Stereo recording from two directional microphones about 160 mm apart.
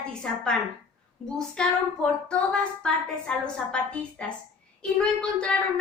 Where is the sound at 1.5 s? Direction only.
5° left (ahead or behind).